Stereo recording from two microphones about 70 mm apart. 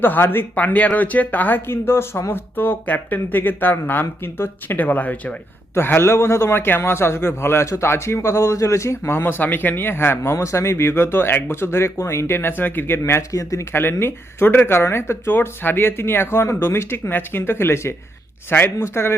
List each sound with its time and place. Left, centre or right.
0.0 s speech: left
5.7 s a man's voice: left
10.3 s a man's voice: left
11.7 s a man's voice: left
13.0 s speech: left
14.0 s a man's voice: left